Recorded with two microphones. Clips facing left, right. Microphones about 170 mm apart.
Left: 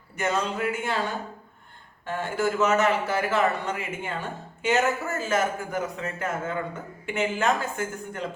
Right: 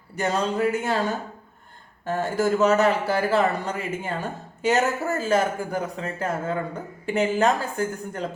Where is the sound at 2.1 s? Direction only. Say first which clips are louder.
Right 4 dB; 40° right (ahead or behind).